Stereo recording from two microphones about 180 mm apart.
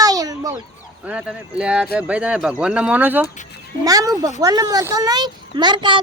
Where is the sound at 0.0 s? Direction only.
20° right (ahead or behind).